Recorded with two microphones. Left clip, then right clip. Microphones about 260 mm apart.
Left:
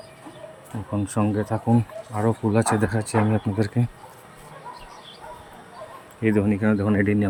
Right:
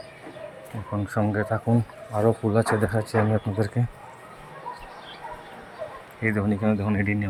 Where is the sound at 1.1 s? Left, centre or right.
Centre.